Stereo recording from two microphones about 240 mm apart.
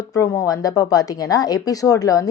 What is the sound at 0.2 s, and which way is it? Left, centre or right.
Speech, centre.